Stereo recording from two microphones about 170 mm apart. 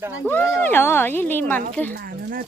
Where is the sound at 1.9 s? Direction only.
60° right (ahead or behind).